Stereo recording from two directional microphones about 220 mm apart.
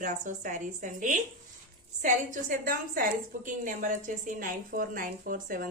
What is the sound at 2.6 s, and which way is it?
A woman's voice, 40° right (ahead or behind).